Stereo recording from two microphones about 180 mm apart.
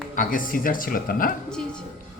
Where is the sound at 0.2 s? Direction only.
50° left (ahead or behind).